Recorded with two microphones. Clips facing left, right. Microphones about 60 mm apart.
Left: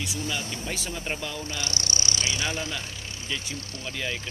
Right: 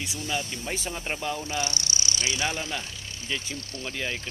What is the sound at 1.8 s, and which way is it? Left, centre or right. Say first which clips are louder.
Speech: left 1 dB; left.